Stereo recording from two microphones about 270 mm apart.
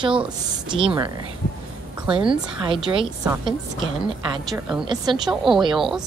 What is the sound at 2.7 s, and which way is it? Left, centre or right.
Speech, centre.